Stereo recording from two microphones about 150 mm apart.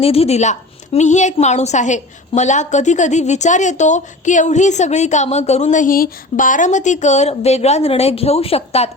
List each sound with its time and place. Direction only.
0.0 s a woman's voice: 40° left (ahead or behind)